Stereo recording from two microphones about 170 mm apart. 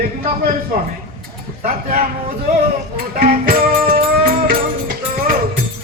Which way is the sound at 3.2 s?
60° right (ahead or behind).